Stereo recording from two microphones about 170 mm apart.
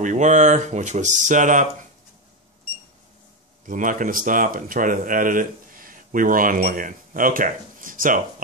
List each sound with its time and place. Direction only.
0.0 s speech: 45° right (ahead or behind)
3.6 s speech: 50° right (ahead or behind)